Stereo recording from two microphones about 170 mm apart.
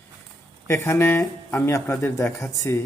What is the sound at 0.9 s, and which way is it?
Speech, 15° left (ahead or behind).